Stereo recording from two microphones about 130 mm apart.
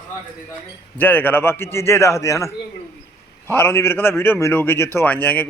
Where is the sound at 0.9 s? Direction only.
15° left (ahead or behind).